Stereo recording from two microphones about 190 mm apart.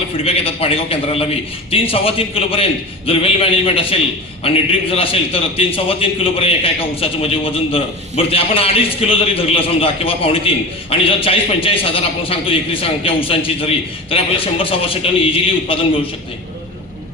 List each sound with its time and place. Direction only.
0.3 s a man's voice: 30° left (ahead or behind)